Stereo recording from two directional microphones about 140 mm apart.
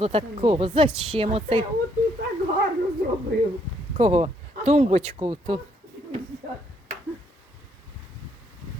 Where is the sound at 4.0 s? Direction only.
50° right (ahead or behind).